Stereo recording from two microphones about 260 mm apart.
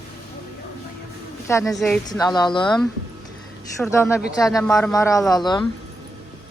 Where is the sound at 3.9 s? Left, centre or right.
Centre.